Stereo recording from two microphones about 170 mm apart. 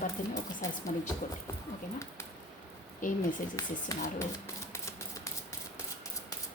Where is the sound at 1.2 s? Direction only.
50° left (ahead or behind).